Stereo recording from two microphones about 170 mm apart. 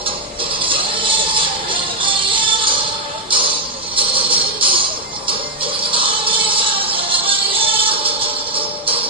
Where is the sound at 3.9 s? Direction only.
30° right (ahead or behind).